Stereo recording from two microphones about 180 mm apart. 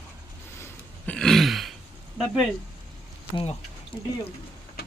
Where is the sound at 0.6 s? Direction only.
5° left (ahead or behind).